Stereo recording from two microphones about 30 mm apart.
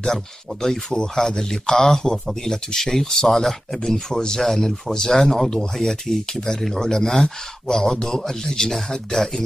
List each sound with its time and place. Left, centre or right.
0.0 s speech: centre
4.4 s speech: centre
5.8 s speech: centre